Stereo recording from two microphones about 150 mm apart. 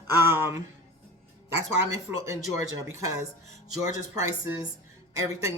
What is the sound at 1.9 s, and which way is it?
Speech, 20° right (ahead or behind).